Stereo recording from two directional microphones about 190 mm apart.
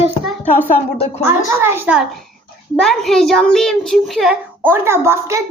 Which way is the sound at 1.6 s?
10° right (ahead or behind).